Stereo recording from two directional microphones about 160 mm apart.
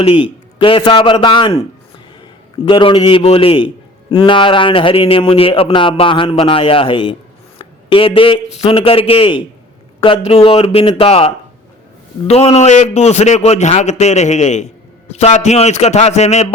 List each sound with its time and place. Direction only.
0.0 s a man's voice: 35° left (ahead or behind)
2.6 s a man's voice: 30° left (ahead or behind)
12.3 s a man's voice: 40° left (ahead or behind)